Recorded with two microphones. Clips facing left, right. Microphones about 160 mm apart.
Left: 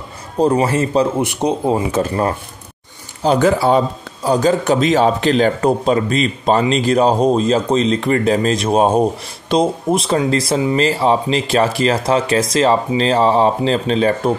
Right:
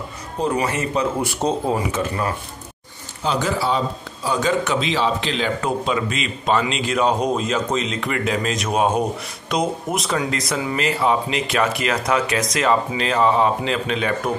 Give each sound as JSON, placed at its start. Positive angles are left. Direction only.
{"t": 0.4, "sound": "a man's voice", "side_deg": 35}
{"t": 1.2, "sound": "speech", "side_deg": 20}
{"t": 1.9, "sound": "a man's voice", "side_deg": 35}
{"t": 3.3, "sound": "a man's voice", "side_deg": 50}